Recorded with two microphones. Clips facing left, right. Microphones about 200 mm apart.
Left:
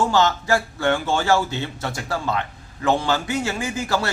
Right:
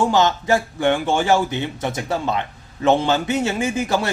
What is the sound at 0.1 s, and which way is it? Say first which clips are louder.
A man's voice: right 2 dB; 20° right (ahead or behind).